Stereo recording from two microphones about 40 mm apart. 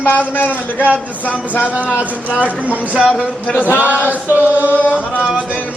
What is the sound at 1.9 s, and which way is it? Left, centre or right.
Speech, left.